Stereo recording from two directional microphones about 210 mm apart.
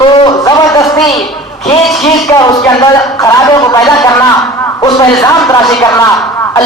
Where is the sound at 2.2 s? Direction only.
15° left (ahead or behind).